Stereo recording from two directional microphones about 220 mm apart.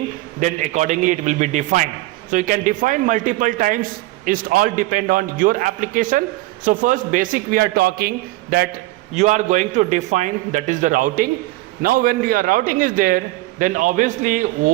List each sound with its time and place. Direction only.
0.3 s a man's voice: 35° right (ahead or behind)
9.1 s a man's voice: 30° right (ahead or behind)